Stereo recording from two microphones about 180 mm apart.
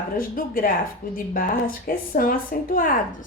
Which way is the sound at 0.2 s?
50° left (ahead or behind).